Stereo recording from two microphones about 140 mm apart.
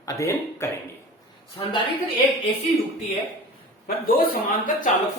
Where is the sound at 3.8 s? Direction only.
90° left.